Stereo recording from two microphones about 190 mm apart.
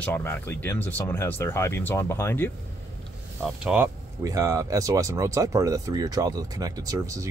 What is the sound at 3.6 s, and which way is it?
Speech, 10° right (ahead or behind).